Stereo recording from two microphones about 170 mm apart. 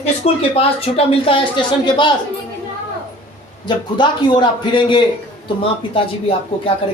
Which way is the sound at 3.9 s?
25° left (ahead or behind).